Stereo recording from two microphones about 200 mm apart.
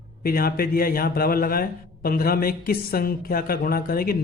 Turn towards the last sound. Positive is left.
turn(degrees=50)  # may be behind; listen again after turning